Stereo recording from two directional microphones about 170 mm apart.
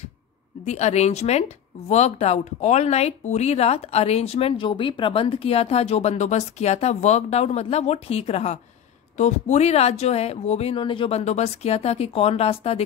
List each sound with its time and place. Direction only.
0.7 s speech: 40° left (ahead or behind)